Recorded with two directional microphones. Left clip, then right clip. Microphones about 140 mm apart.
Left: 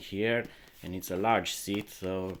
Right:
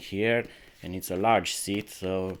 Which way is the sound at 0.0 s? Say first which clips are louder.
Right 4 dB; 35° right (ahead or behind).